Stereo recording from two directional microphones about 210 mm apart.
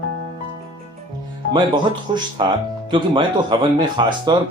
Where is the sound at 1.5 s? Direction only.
20° right (ahead or behind).